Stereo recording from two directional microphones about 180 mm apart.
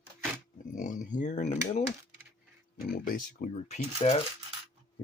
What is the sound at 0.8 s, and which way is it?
Speech, 45° left (ahead or behind).